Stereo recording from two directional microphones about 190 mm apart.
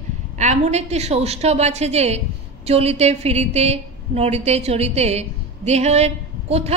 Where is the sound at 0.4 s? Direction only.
35° right (ahead or behind).